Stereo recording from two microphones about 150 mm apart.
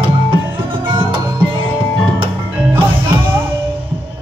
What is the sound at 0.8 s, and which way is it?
Music, 35° right (ahead or behind).